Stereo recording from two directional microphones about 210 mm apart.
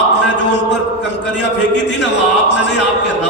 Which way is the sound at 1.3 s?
90° left.